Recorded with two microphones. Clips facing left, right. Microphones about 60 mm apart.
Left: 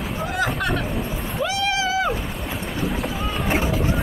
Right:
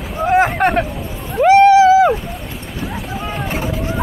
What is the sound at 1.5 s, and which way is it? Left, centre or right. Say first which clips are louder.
Vehicle: right 19 dB; right.